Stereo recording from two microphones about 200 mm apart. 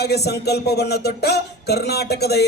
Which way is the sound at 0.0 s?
55° left (ahead or behind).